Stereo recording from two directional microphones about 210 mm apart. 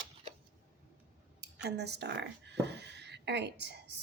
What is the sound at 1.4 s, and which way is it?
Speech, 50° right (ahead or behind).